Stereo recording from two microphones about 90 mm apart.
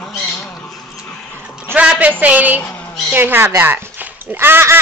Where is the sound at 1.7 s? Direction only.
15° right (ahead or behind).